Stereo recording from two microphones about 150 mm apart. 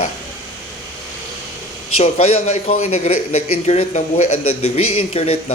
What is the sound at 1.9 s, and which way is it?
A man's voice, 45° left (ahead or behind).